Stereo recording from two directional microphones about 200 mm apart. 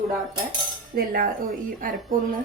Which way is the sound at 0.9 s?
50° right (ahead or behind).